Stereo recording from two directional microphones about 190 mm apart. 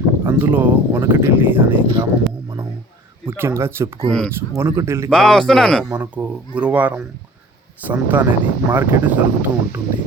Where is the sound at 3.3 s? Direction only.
15° right (ahead or behind).